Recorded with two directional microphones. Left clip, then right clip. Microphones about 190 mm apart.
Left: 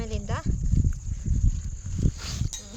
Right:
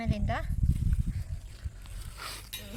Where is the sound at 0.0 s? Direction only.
50° left (ahead or behind).